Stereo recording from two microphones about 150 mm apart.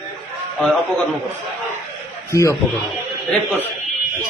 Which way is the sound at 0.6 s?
5° left (ahead or behind).